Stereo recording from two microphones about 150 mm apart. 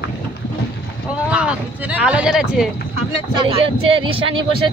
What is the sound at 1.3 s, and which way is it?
Speech, 10° right (ahead or behind).